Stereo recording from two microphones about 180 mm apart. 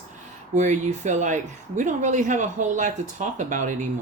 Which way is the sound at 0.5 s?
40° right (ahead or behind).